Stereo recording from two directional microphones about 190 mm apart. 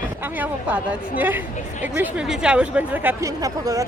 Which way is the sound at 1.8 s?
10° right (ahead or behind).